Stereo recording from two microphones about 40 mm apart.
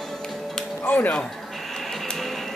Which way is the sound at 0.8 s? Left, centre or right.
Left.